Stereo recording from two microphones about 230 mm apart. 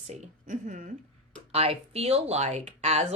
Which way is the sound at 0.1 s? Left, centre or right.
Right.